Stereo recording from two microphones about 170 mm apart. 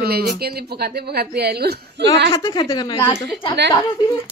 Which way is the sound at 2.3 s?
25° left (ahead or behind).